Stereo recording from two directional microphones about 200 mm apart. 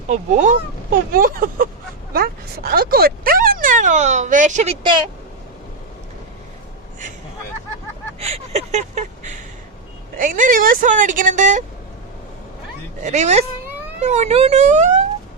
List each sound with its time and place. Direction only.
0.1 s speech: 35° right (ahead or behind)
8.2 s a sound: 35° right (ahead or behind)
10.2 s speech: 40° right (ahead or behind)
13.0 s speech: 35° right (ahead or behind)